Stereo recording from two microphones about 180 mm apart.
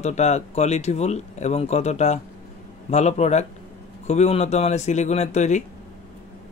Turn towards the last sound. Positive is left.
turn(degrees=40)  # may be behind; listen again after turning